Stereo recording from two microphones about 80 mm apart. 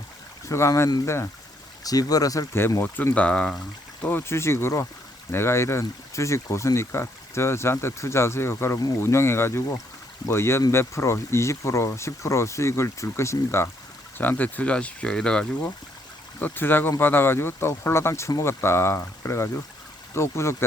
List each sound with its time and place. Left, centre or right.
0.4 s speech: left
1.8 s speech: left
2.5 s speech: left; by 3.5 s centre
4.3 s speech: left
14.2 s speech: left
16.4 s speech: left